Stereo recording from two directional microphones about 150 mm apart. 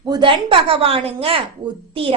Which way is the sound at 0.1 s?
35° right (ahead or behind).